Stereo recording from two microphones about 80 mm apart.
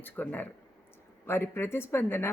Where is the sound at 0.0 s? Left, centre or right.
Left.